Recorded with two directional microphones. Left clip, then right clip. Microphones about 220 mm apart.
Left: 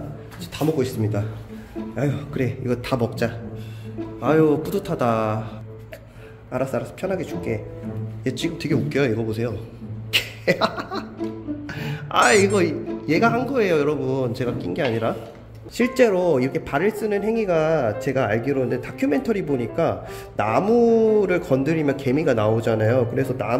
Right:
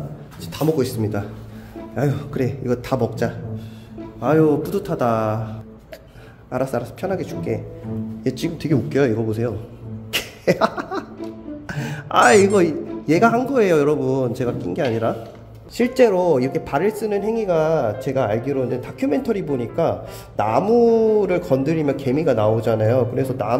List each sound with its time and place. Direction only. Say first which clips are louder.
0.5 s a man's voice: right 2 dB; 5° right (ahead or behind)
6.5 s a man's voice: right 2 dB; 5° right (ahead or behind)
10.1 s cough: right 1 dB; 15° right (ahead or behind)
11.6 s speech: right 2 dB; 20° right (ahead or behind); by 23.5 s centre (ahead or behind)